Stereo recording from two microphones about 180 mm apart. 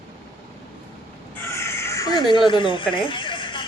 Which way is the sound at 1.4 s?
15° left (ahead or behind).